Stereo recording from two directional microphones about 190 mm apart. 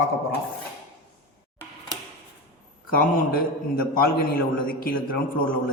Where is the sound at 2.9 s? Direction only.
50° left (ahead or behind).